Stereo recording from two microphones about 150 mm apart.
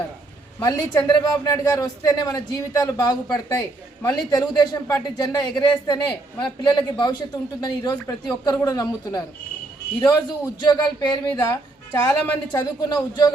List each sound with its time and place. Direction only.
0.6 s speech: 25° left (ahead or behind)